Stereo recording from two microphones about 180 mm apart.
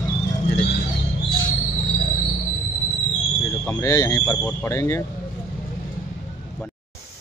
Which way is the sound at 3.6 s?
15° left (ahead or behind).